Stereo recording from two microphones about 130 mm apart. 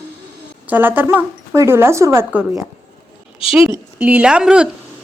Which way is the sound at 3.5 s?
5° right (ahead or behind).